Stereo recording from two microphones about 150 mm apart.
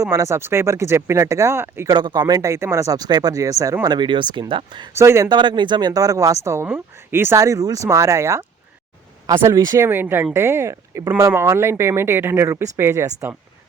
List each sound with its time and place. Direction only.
0.0 s speech: 20° right (ahead or behind)
1.9 s speech: 30° right (ahead or behind)
4.9 s speech: 20° right (ahead or behind)